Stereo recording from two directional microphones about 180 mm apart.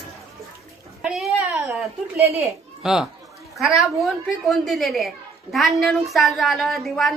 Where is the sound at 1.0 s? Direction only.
Centre (ahead or behind).